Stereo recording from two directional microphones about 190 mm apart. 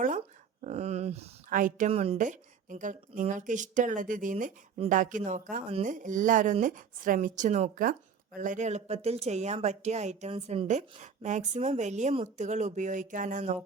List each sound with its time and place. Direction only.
0.6 s speech: 35° right (ahead or behind)
1.9 s speech: 30° right (ahead or behind)